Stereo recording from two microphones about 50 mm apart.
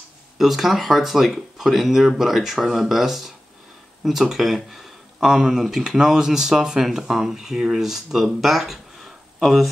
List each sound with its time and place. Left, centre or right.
0.4 s speech: centre